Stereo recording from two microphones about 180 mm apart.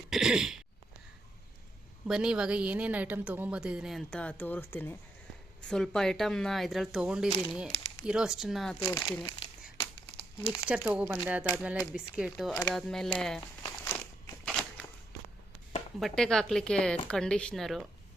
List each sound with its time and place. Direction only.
0.1 s a woman's voice: 5° right (ahead or behind)
2.0 s a woman's voice: 5° right (ahead or behind)
8.8 s speech: 15° left (ahead or behind)
10.7 s a woman's voice: 10° right (ahead or behind)
13.8 s a sound: 10° left (ahead or behind)
16.0 s a woman's voice: centre (ahead or behind)